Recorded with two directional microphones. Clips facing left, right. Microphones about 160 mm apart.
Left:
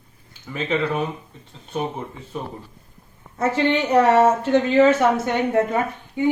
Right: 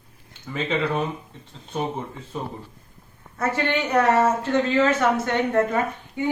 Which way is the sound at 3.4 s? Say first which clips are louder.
Left 4 dB; 20° left (ahead or behind).